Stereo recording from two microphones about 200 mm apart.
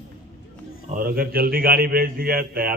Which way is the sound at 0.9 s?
50° right (ahead or behind).